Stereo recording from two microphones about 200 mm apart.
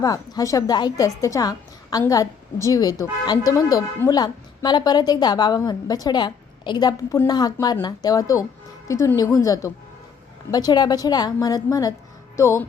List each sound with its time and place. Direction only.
0.0 s a woman's voice: 20° left (ahead or behind)